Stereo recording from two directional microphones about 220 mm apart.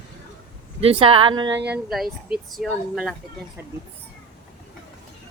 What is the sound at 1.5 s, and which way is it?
Speech, 55° right (ahead or behind).